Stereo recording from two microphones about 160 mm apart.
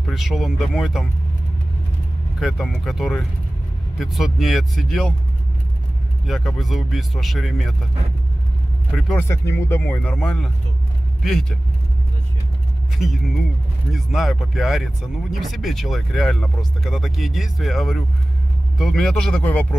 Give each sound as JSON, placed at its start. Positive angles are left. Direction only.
{"t": 0.0, "sound": "speech", "side_deg": 0}
{"t": 2.4, "sound": "speech", "side_deg": 0}
{"t": 6.2, "sound": "speech", "side_deg": 0}
{"t": 8.9, "sound": "speech", "side_deg": 0}
{"t": 9.3, "sound": "speech", "side_deg": 15}
{"t": 12.9, "sound": "speech", "side_deg": 0}